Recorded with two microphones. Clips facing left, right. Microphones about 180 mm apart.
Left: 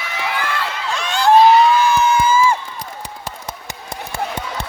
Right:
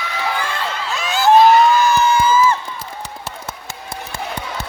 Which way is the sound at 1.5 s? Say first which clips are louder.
Even; 45° right (ahead or behind).